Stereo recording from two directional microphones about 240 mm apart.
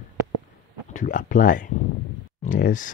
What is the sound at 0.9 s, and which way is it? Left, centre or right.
Speech, left.